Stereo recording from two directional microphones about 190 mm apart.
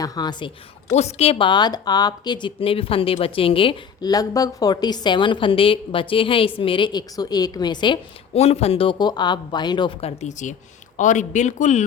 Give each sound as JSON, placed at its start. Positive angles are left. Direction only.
{"t": 0.0, "sound": "a woman's voice", "side_deg": 20}